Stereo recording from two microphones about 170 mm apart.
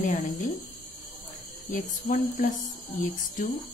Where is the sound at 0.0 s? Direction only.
55° left (ahead or behind).